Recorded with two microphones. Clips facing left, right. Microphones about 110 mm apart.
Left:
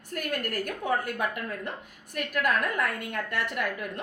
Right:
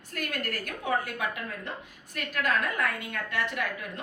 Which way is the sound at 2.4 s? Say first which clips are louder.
Even; 55° left (ahead or behind).